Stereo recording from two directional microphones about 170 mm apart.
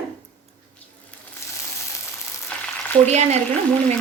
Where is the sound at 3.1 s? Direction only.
40° right (ahead or behind).